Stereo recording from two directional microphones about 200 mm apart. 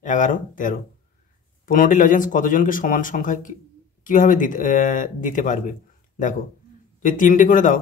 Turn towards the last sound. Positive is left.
turn(degrees=40)  # may be behind; listen again after turning